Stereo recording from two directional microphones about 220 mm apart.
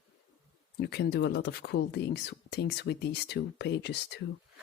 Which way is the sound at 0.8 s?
50° left (ahead or behind).